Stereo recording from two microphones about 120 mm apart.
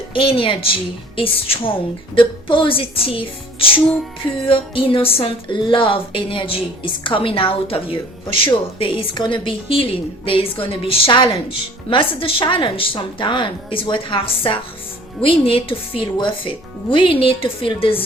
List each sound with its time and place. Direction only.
0.1 s speech: 45° left (ahead or behind)